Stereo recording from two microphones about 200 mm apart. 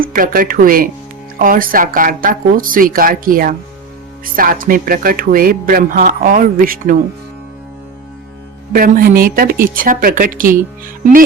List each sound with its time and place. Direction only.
0.0 s speech: 45° right (ahead or behind)
8.7 s speech: 45° right (ahead or behind)